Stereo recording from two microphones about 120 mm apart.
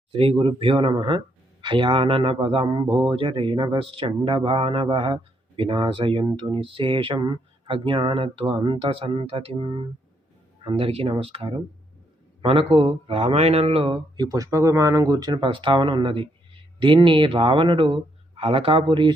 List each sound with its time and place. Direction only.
0.1 s speech: 50° right (ahead or behind)
14.2 s speech: 30° right (ahead or behind); by 19.1 s 45° right (ahead or behind)